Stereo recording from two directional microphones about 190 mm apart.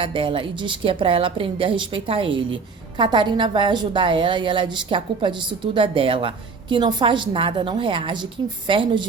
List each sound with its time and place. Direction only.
0.0 s a woman's voice: 25° right (ahead or behind)